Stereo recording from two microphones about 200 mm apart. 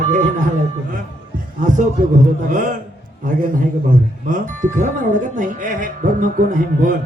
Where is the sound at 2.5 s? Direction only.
40° right (ahead or behind).